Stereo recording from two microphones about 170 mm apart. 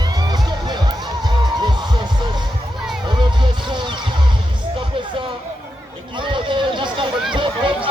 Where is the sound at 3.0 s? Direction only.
30° right (ahead or behind).